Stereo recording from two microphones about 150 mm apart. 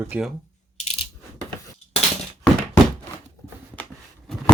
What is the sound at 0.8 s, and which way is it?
Coin, 45° left (ahead or behind).